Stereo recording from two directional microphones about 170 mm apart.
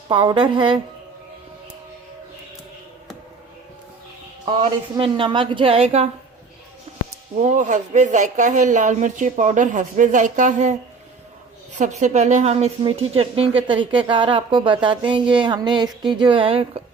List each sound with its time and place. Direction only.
0.1 s a woman's voice: 30° right (ahead or behind)
4.9 s a woman's voice: 30° right (ahead or behind)
7.3 s a woman's voice: 45° right (ahead or behind)